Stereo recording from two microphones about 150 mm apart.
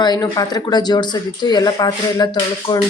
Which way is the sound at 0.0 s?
25° left (ahead or behind).